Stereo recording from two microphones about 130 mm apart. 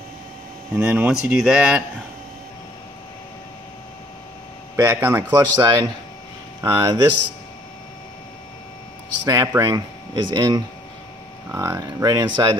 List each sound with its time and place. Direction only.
0.7 s speech: 5° right (ahead or behind)
4.7 s a man's voice: 20° right (ahead or behind)
9.2 s a man's voice: 30° right (ahead or behind)